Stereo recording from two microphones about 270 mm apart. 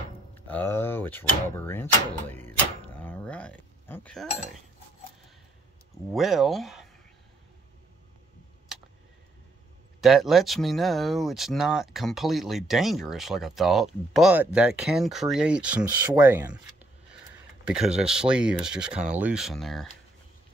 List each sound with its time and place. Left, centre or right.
0.3 s speech: centre
6.1 s speech: centre
9.9 s speech: centre
17.6 s speech: centre